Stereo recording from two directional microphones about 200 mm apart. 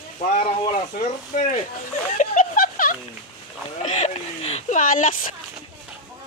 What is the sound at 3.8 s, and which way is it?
Speech, 35° left (ahead or behind).